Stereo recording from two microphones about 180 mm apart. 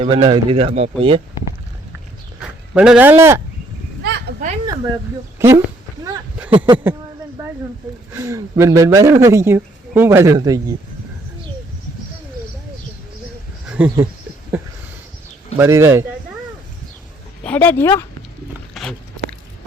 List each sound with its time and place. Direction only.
0.0 s speech: 25° right (ahead or behind)
2.4 s speech: 5° right (ahead or behind)
4.0 s a sound: 65° right (ahead or behind)
5.4 s a sound: 15° right (ahead or behind)
8.1 s speech: 15° right (ahead or behind)
13.7 s speech: 10° right (ahead or behind)
15.5 s speech: 15° right (ahead or behind)
17.4 s speech: 10° left (ahead or behind)
18.7 s a sound: 5° left (ahead or behind)